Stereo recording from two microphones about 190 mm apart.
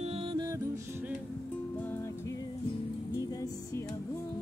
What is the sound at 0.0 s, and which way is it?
Music, 30° right (ahead or behind).